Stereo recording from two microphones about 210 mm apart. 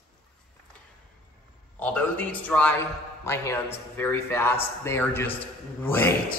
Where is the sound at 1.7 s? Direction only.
5° left (ahead or behind).